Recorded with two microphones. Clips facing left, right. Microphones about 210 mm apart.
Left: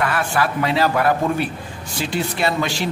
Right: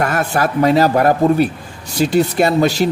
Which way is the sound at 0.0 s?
40° right (ahead or behind).